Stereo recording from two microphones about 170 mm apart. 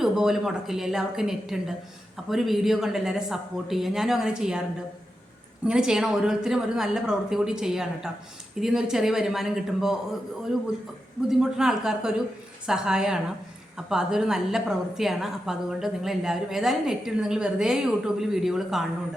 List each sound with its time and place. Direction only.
0.0 s a woman's voice: centre (ahead or behind)
5.6 s a woman's voice: 5° right (ahead or behind)
11.3 s a woman's voice: 5° right (ahead or behind)